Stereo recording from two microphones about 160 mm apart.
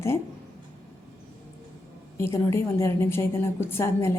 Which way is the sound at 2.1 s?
20° left (ahead or behind).